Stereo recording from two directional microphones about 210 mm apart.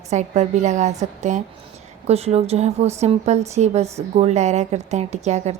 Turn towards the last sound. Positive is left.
turn(degrees=-35)  # may be behind; listen again after turning